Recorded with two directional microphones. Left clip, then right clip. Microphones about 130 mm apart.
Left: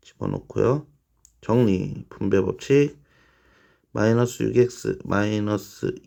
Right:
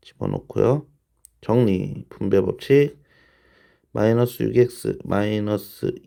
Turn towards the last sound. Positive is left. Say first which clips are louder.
# right 2 dB
turn(degrees=-15)  # may be behind; listen again after turning